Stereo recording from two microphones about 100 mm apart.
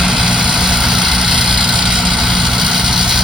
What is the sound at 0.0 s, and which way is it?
Vehicle, 5° right (ahead or behind).